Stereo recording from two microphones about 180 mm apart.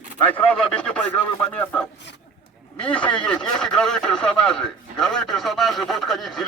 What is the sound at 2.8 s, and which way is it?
Speech, 5° left (ahead or behind).